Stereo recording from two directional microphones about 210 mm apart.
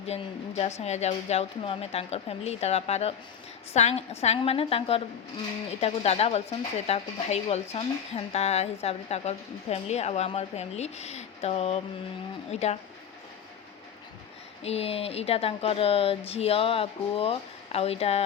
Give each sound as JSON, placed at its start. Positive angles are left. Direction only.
{"t": 0.0, "sound": "speech", "side_deg": 30}
{"t": 14.6, "sound": "speech", "side_deg": 30}